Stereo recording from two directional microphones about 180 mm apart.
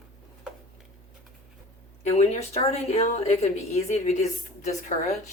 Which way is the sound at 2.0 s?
40° left (ahead or behind).